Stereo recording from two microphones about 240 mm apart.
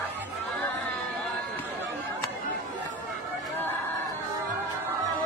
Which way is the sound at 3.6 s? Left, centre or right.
Centre.